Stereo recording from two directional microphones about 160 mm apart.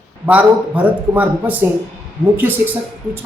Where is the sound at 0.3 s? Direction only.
10° right (ahead or behind).